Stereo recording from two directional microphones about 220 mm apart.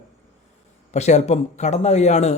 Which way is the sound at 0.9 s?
30° left (ahead or behind).